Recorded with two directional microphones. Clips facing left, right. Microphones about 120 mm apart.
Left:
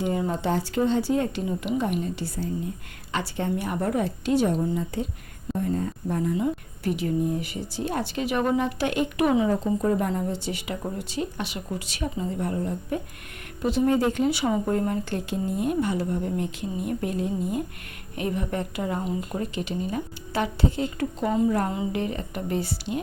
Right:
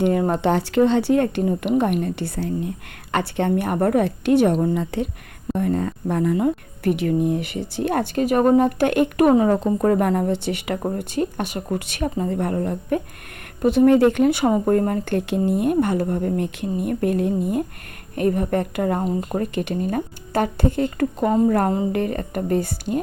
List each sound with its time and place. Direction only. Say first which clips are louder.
0.0 s speech: right 7 dB; 65° right (ahead or behind)
5.5 s speech: right 5 dB; 85° right; by 9.5 s 50° right (ahead or behind)
9.5 s speech: right 5 dB; 65° right (ahead or behind)
10.8 s speech: right 7 dB; 50° right (ahead or behind)